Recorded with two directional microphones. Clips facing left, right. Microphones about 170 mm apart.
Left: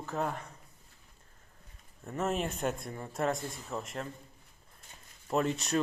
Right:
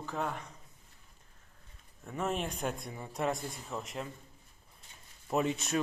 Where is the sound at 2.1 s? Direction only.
Centre (ahead or behind).